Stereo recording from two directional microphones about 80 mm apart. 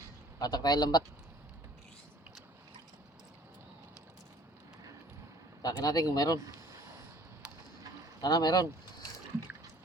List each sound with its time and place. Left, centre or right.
0.3 s speech: left
5.6 s speech: left
8.2 s speech: left